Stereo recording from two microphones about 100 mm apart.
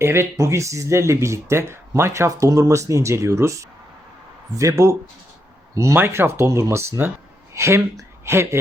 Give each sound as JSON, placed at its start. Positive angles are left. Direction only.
{"t": 0.0, "sound": "speech", "side_deg": -25}